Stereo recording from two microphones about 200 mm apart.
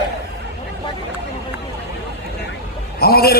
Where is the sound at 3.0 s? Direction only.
50° left (ahead or behind).